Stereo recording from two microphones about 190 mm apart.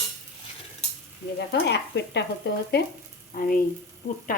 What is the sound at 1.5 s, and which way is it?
Stir, 60° left (ahead or behind).